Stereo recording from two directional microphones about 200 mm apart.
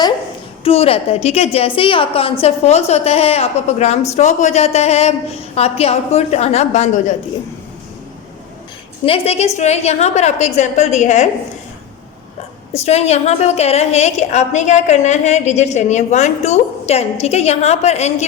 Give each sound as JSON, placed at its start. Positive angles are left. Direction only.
{"t": 0.6, "sound": "a woman's voice", "side_deg": 30}
{"t": 9.0, "sound": "a woman's voice", "side_deg": 30}
{"t": 12.7, "sound": "a woman's voice", "side_deg": 30}